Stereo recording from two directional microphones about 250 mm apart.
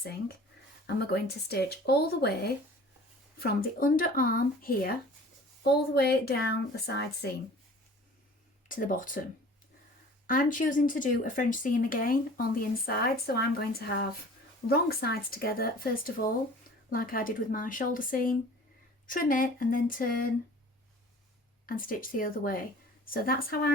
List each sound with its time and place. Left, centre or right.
0.9 s speech: left
8.7 s speech: left
10.2 s speech: left
21.7 s speech: left